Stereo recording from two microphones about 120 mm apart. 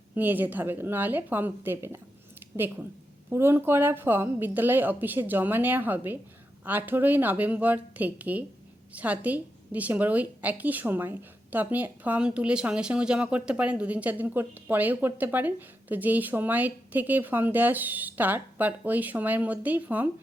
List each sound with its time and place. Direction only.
0.1 s a woman's voice: 15° right (ahead or behind)